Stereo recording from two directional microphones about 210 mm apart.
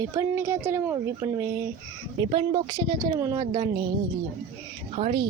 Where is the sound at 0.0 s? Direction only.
15° right (ahead or behind).